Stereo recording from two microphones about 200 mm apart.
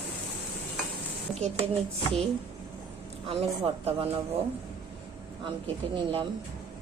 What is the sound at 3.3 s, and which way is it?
Speech, 25° right (ahead or behind).